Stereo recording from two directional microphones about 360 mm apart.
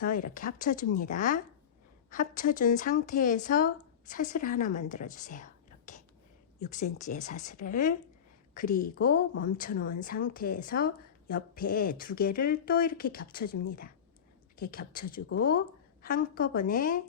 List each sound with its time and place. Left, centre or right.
0.0 s a woman's voice: left